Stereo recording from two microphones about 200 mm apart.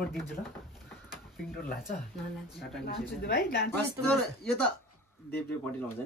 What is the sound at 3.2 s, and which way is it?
Speech, 50° left (ahead or behind).